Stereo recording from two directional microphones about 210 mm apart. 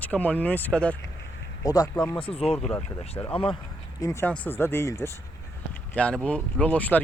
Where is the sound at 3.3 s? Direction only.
25° left (ahead or behind).